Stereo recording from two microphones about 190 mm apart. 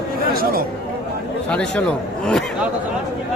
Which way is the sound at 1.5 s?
5° left (ahead or behind).